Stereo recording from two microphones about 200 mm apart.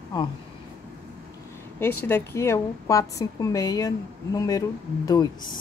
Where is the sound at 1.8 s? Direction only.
10° left (ahead or behind).